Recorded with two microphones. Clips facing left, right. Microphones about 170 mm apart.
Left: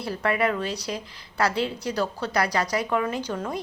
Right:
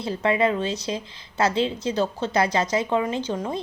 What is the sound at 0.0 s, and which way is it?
A woman's voice, 20° right (ahead or behind).